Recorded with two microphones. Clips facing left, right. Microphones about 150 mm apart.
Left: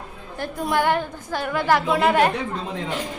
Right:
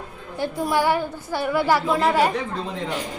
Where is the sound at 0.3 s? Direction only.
10° right (ahead or behind).